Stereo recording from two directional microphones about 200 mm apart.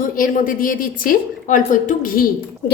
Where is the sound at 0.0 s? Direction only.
45° left (ahead or behind).